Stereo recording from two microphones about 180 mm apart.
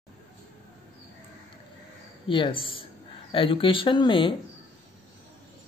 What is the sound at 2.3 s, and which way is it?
Speech, 30° left (ahead or behind).